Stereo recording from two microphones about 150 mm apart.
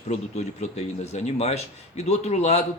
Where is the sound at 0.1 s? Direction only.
45° left (ahead or behind).